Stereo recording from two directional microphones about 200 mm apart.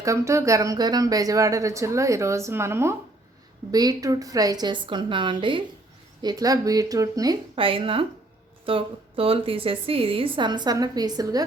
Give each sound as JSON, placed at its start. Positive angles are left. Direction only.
{"t": 0.0, "sound": "a woman's voice", "side_deg": -15}